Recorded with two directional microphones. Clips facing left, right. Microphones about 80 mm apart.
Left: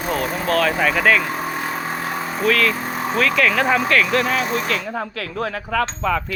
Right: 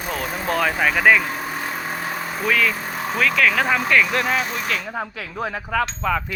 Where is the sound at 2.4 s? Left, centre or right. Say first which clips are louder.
Left 2 dB; centre.